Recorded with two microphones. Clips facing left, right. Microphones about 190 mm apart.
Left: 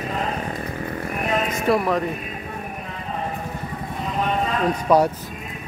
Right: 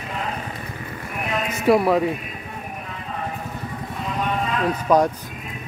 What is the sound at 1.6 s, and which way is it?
Speech, 5° right (ahead or behind).